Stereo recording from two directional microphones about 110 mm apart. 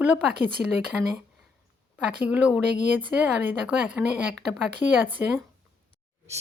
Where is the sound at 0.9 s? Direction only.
10° right (ahead or behind).